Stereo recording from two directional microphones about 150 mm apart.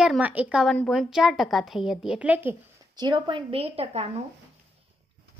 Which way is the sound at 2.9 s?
30° right (ahead or behind).